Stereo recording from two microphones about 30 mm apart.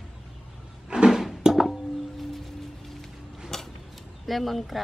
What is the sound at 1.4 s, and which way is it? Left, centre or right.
Music, centre.